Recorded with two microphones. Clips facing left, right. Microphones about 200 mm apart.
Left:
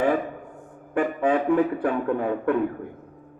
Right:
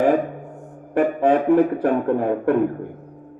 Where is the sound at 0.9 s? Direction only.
40° right (ahead or behind).